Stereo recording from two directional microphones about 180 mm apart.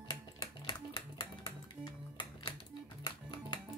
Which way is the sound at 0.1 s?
25° left (ahead or behind).